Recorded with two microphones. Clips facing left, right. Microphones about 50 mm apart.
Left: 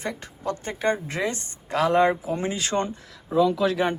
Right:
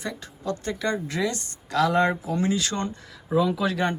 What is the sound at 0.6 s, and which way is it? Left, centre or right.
Speech, left.